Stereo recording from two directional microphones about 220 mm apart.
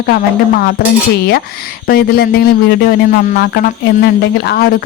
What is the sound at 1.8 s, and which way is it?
Speech, 45° left (ahead or behind).